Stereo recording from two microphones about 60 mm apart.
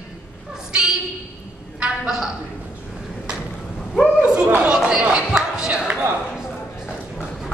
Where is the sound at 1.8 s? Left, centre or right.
Centre.